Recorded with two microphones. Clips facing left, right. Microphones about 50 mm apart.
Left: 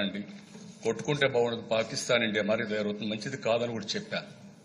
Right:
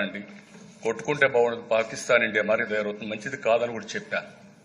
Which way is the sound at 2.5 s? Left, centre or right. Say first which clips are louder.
Right 4 dB; right.